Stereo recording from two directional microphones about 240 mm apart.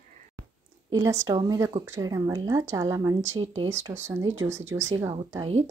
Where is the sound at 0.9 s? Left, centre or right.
Centre.